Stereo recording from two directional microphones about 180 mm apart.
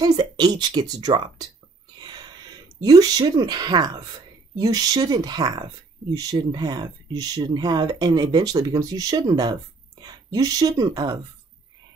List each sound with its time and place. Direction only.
0.0 s speech: 25° right (ahead or behind)
2.8 s speech: 20° right (ahead or behind)